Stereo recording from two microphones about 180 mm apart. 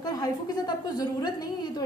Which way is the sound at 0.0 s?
20° left (ahead or behind).